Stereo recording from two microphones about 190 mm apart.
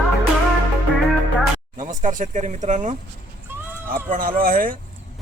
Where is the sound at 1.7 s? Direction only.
45° right (ahead or behind).